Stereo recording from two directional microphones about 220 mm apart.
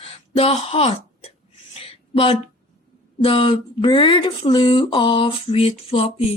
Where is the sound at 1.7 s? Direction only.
25° left (ahead or behind).